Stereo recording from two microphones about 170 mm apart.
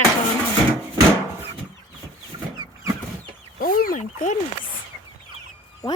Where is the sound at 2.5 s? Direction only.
25° right (ahead or behind).